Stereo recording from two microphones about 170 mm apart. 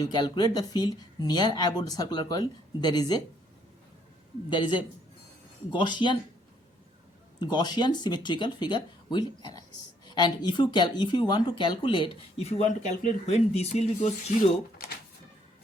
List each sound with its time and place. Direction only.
0.0 s speech: 25° left (ahead or behind)
4.4 s speech: 25° left (ahead or behind)
7.3 s speech: 25° left (ahead or behind); by 14.3 s 40° left (ahead or behind)